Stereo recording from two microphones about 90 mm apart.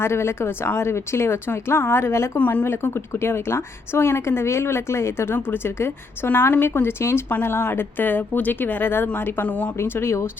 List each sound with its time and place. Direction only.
0.0 s speech: 30° left (ahead or behind)
2.4 s speech: 20° left (ahead or behind)
9.7 s speech: 25° left (ahead or behind)